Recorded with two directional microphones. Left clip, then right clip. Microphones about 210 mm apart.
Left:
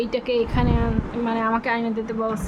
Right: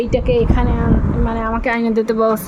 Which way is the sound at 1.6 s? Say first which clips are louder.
Right 7 dB; 20° right (ahead or behind).